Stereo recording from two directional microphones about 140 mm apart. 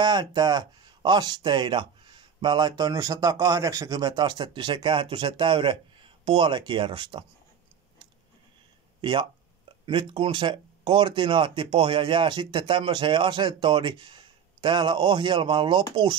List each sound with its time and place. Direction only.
0.0 s speech: 30° right (ahead or behind)
9.0 s speech: 35° right (ahead or behind)